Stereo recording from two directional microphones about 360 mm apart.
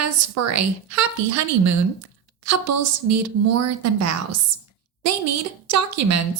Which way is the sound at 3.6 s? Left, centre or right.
Right.